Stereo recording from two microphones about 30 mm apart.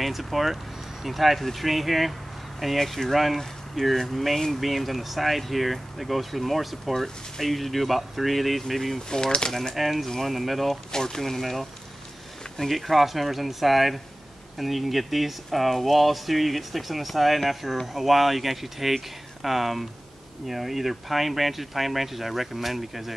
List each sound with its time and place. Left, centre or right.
0.0 s speech: centre
2.8 s speech: centre
9.1 s speech: left
9.8 s speech: centre
10.0 s speech: centre
10.3 s speech: centre
10.9 s speech: centre
12.6 s speech: centre